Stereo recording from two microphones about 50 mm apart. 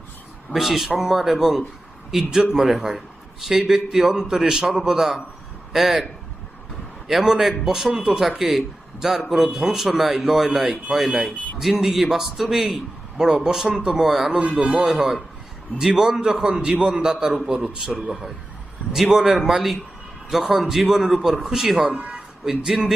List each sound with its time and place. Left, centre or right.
0.5 s a man's voice: centre
4.0 s a man's voice: centre
7.1 s a man's voice: centre
14.6 s speech: centre
18.0 s a man's voice: centre
21.9 s speech: right
22.4 s speech: centre